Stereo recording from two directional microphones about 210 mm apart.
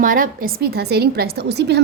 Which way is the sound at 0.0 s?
40° right (ahead or behind).